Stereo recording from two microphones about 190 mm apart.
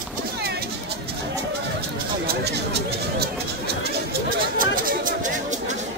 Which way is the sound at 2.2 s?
60° right (ahead or behind).